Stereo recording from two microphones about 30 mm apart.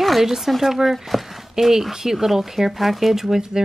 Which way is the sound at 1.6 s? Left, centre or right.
Centre.